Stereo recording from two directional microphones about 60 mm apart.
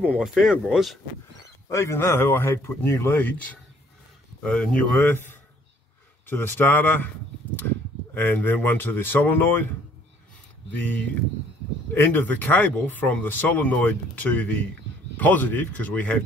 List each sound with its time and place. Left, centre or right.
0.3 s speech: centre
1.7 s speech: left
4.4 s speech: centre
5.0 s a man's voice: left
10.8 s speech: left
11.9 s speech: left